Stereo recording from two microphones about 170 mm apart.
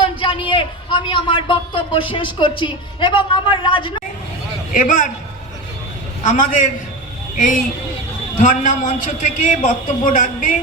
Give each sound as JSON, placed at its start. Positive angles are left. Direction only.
{"t": 0.0, "sound": "a man's voice", "side_deg": 30}
{"t": 4.7, "sound": "a man's voice", "side_deg": 50}
{"t": 6.2, "sound": "a man's voice", "side_deg": 50}